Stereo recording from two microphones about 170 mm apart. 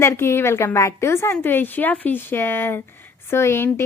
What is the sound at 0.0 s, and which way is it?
A woman's voice, 15° left (ahead or behind).